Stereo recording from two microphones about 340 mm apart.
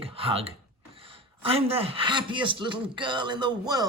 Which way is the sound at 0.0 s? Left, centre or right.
Centre.